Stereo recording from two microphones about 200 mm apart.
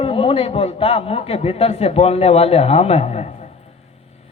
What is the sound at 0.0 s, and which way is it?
A man's voice, 25° left (ahead or behind).